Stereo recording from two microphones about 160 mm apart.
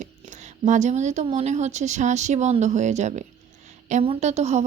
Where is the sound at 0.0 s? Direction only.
50° right (ahead or behind).